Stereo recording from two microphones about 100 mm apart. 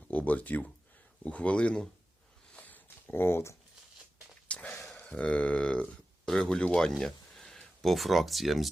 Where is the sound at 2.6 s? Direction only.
20° left (ahead or behind).